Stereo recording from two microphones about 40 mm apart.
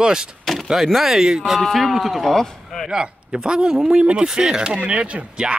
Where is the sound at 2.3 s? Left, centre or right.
Centre.